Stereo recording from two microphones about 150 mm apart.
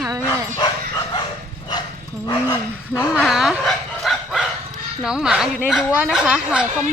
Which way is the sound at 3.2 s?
Centre (ahead or behind).